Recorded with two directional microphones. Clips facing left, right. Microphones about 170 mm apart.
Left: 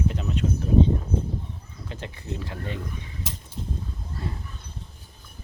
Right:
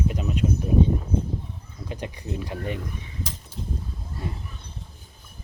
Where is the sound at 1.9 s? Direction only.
15° right (ahead or behind).